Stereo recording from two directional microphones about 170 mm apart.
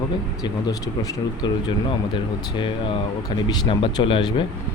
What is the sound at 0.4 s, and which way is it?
Speech, 20° left (ahead or behind).